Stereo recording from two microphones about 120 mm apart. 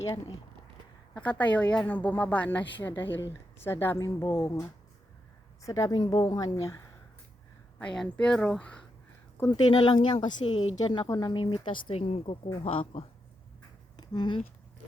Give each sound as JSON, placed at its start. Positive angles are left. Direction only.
{"t": 1.1, "sound": "a woman's voice", "side_deg": 10}
{"t": 7.8, "sound": "speech", "side_deg": 10}
{"t": 9.5, "sound": "a woman's voice", "side_deg": 40}
{"t": 13.9, "sound": "a sound", "side_deg": 35}